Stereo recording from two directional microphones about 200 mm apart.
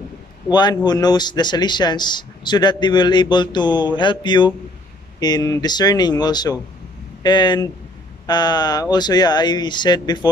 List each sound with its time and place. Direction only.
0.5 s speech: 20° left (ahead or behind)